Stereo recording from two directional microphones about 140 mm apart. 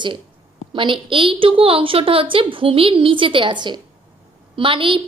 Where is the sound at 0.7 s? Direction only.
35° right (ahead or behind).